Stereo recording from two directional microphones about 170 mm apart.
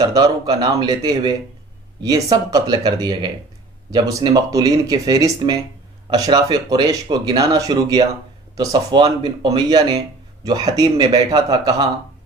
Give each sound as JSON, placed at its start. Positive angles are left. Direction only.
{"t": 0.0, "sound": "speech", "side_deg": -25}
{"t": 2.5, "sound": "speech", "side_deg": -25}